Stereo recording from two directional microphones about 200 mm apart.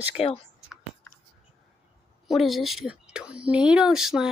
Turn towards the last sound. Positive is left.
turn(degrees=-5)  # may be behind; listen again after turning